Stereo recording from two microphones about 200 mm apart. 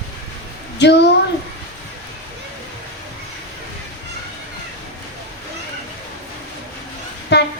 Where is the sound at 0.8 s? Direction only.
60° left (ahead or behind).